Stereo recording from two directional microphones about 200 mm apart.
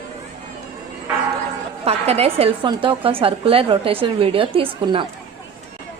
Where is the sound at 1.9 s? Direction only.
30° right (ahead or behind).